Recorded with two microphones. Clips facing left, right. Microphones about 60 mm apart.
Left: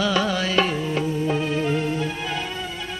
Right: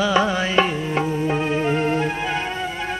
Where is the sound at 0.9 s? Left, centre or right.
Right.